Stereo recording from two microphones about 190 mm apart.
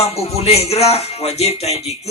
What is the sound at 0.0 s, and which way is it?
Speech, 35° left (ahead or behind).